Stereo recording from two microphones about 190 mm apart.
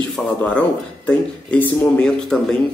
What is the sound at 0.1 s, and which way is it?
Speech, 5° left (ahead or behind).